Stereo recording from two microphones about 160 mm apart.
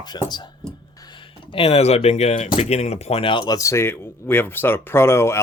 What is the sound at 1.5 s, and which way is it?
Speech, 40° left (ahead or behind).